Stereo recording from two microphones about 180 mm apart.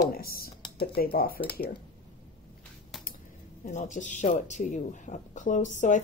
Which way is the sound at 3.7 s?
45° left (ahead or behind).